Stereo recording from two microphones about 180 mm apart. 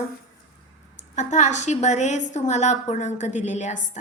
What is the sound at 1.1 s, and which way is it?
A woman's voice, 40° left (ahead or behind).